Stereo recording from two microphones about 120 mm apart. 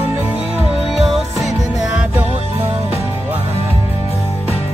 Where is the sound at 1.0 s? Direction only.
Centre (ahead or behind).